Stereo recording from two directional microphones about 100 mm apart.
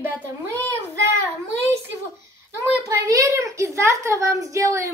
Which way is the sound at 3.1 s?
35° right (ahead or behind).